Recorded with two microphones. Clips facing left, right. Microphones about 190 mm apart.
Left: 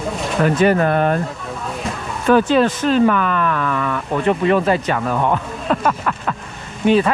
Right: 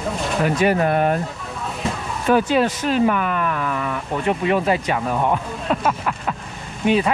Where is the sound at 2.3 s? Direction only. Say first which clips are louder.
Left 4 dB; 10° right (ahead or behind).